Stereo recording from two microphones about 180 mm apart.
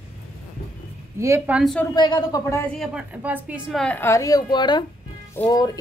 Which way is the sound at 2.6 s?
Centre (ahead or behind).